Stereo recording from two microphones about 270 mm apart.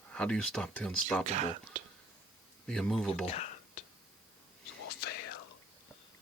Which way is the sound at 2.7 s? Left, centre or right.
Centre.